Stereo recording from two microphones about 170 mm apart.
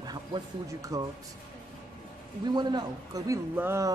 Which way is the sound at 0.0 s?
25° right (ahead or behind).